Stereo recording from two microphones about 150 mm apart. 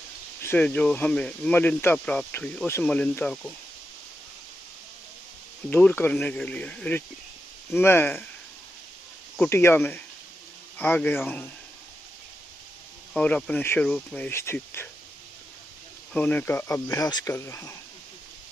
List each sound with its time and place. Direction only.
0.4 s speech: 15° left (ahead or behind)
5.7 s speech: 10° left (ahead or behind)
9.4 s speech: 15° left (ahead or behind)
13.1 s speech: 5° left (ahead or behind)
16.1 s speech: 10° left (ahead or behind)